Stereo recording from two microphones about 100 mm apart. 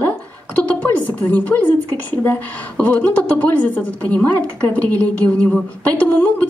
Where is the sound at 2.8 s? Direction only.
15° left (ahead or behind).